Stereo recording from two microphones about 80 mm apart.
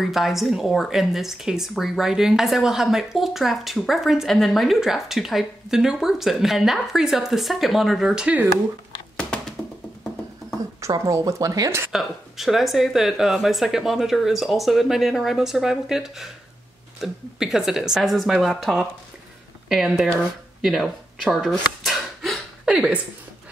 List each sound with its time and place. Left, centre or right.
0.0 s a woman's voice: centre
11.1 s speech: right
11.9 s a woman's voice: centre
20.6 s a sound: centre
22.7 s a woman's voice: centre